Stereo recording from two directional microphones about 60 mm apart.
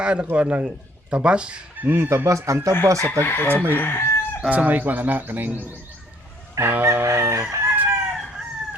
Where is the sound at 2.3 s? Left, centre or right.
Right.